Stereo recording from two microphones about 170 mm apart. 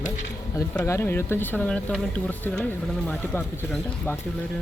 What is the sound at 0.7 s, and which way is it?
Speech, 10° left (ahead or behind).